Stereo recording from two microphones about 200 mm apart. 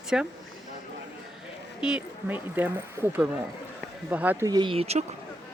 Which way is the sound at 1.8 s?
5° right (ahead or behind).